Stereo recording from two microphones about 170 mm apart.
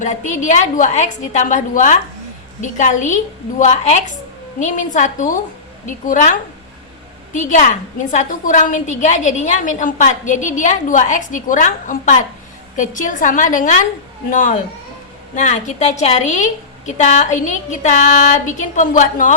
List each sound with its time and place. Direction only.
0.0 s a woman's voice: 45° left (ahead or behind)
7.3 s a woman's voice: 45° left (ahead or behind)